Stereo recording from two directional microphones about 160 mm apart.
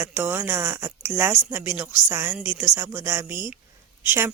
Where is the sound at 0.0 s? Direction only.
15° right (ahead or behind).